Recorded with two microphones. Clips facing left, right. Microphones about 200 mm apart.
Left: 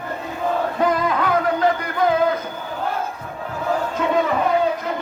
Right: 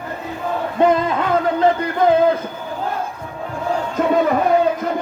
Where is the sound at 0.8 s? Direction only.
25° right (ahead or behind).